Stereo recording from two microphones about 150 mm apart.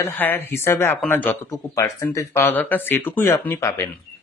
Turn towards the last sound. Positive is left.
turn(degrees=15)  # may be behind; listen again after turning